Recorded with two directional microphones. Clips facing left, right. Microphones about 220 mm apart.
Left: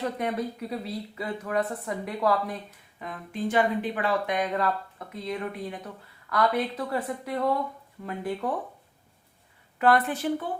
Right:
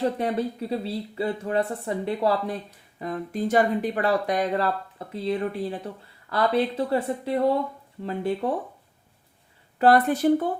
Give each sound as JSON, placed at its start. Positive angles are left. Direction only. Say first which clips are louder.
{"t": 0.0, "sound": "speech", "louder": "right 4 dB", "side_deg": -30}
{"t": 9.7, "sound": "speech", "louder": "right 4 dB", "side_deg": -35}